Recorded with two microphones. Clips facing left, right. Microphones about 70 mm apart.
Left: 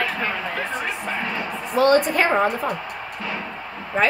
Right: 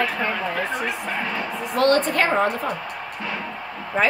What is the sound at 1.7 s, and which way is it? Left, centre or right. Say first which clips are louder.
Speech: left 2 dB; centre.